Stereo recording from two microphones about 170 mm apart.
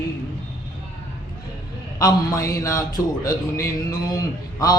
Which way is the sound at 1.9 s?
20° left (ahead or behind).